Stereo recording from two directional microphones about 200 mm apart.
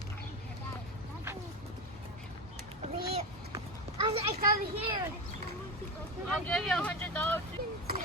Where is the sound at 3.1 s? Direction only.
25° right (ahead or behind).